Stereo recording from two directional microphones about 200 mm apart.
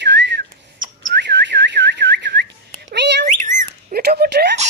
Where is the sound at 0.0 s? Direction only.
60° right (ahead or behind).